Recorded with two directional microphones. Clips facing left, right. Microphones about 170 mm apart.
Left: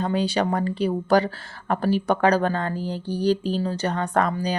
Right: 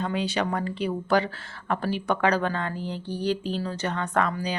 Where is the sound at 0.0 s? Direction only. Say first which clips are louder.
Left 4 dB; 35° left (ahead or behind).